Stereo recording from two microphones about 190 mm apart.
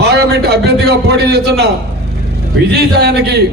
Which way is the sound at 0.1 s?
60° right (ahead or behind).